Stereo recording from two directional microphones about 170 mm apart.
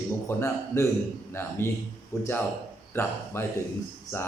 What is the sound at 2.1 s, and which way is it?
Speech, 15° left (ahead or behind).